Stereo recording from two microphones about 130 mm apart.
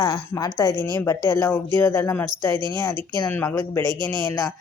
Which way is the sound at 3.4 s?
25° left (ahead or behind).